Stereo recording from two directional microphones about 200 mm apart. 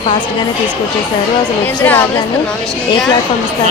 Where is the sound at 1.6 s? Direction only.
10° left (ahead or behind).